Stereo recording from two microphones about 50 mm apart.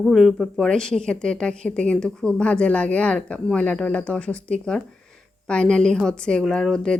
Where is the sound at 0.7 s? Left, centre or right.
Centre.